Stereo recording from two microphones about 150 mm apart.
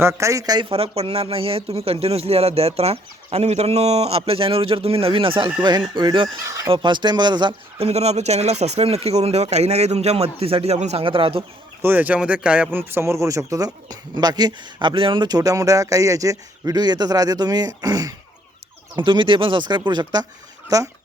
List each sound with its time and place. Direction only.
0.0 s speech: 20° right (ahead or behind)
6.4 s speech: 20° right (ahead or behind)
6.7 s a man's voice: 30° right (ahead or behind)
11.8 s speech: 15° right (ahead or behind)